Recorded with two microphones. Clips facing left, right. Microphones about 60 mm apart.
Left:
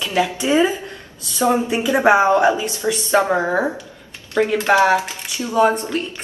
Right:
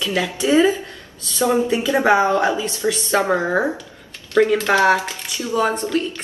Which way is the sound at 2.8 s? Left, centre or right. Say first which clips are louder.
Left 2 dB; centre.